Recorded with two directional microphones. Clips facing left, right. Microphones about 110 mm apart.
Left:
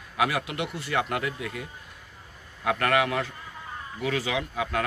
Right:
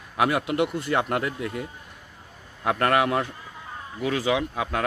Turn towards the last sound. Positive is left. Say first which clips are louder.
# right 3 dB
turn(degrees=-25)  # may be behind; listen again after turning